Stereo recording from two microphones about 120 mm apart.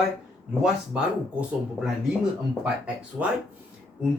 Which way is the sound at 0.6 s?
10° right (ahead or behind).